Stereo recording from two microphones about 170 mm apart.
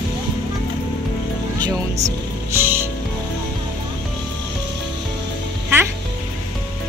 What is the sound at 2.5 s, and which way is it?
Music, 15° right (ahead or behind).